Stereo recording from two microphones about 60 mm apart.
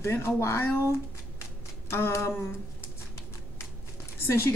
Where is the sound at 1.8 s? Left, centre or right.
Left.